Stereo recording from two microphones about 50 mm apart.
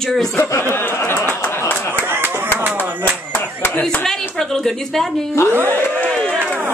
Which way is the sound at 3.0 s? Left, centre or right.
Left.